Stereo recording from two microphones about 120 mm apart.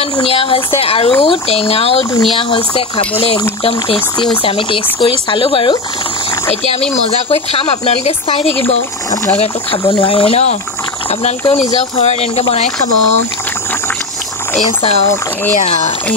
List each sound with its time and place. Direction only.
0.2 s speech: 50° left (ahead or behind)
7.2 s speech: 55° left (ahead or behind)
14.8 s speech: 55° left (ahead or behind)